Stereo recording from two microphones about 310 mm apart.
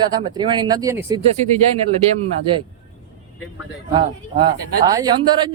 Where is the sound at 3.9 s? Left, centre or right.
Centre.